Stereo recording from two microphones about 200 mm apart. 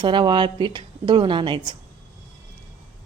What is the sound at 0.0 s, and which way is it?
A woman's voice, 25° right (ahead or behind).